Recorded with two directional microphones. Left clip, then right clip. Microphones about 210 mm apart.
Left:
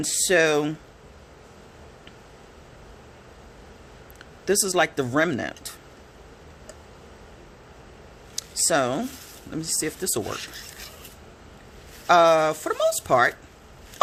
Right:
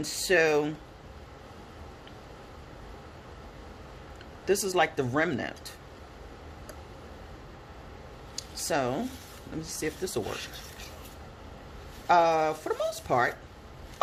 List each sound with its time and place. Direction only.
0.0 s speech: 35° left (ahead or behind)
4.4 s speech: 35° left (ahead or behind)
8.4 s a sound: 40° left (ahead or behind)
9.5 s speech: 40° left (ahead or behind)
10.2 s speech: 25° left (ahead or behind)
12.0 s speech: 40° left (ahead or behind)